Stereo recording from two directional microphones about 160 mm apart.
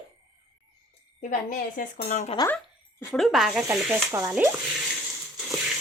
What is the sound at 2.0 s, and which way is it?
Speech, 45° left (ahead or behind).